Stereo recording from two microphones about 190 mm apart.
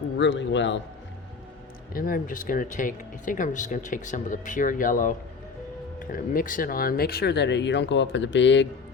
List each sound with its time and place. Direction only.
0.2 s a man's voice: 70° left (ahead or behind)
1.9 s speech: 50° left (ahead or behind); by 8.6 s 70° left (ahead or behind)